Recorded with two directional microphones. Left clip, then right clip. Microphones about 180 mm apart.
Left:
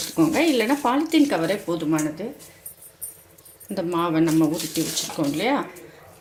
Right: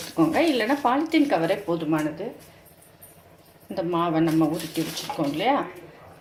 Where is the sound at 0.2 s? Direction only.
55° left (ahead or behind).